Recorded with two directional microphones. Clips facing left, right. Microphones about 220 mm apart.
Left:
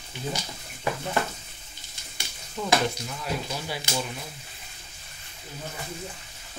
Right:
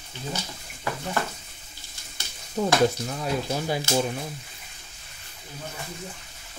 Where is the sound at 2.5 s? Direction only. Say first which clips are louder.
Right 4 dB; 40° right (ahead or behind).